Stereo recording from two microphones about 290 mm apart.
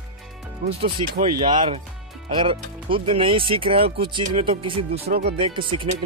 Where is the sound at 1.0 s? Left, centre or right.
Right.